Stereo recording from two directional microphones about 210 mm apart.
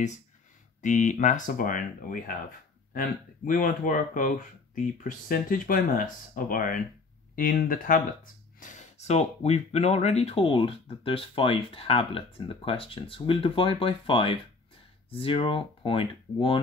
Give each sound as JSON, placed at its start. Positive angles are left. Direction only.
{"t": 0.8, "sound": "speech", "side_deg": 35}